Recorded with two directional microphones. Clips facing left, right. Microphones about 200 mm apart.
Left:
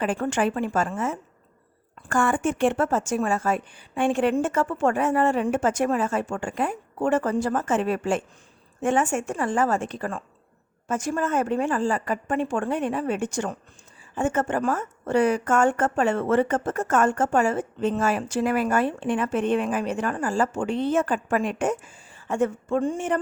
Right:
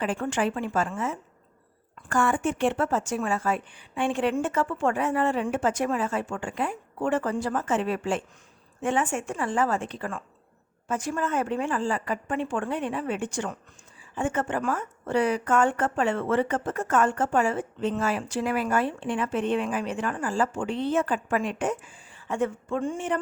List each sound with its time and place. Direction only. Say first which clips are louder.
0.0 s a woman's voice: left 3 dB; 45° left (ahead or behind)